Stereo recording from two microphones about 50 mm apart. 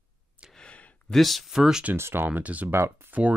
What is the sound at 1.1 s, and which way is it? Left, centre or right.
Speech, centre.